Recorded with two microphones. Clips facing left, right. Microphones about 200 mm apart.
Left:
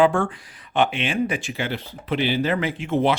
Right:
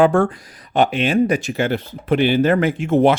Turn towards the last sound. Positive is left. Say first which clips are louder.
# right 6 dB
turn(degrees=-45)  # may be behind; listen again after turning